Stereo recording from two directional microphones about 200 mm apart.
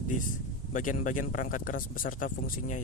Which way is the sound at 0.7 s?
40° left (ahead or behind).